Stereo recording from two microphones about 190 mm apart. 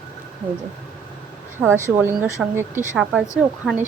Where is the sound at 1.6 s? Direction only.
15° right (ahead or behind).